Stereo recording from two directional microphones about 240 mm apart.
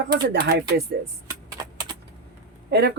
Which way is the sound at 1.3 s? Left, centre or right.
Centre.